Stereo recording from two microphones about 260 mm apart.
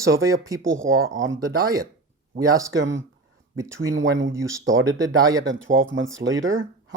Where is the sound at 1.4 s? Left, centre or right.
Centre.